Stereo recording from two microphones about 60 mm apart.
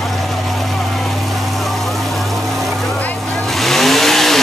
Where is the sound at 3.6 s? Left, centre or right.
Centre.